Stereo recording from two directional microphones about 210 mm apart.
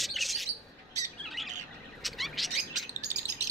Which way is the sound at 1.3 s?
Centre (ahead or behind).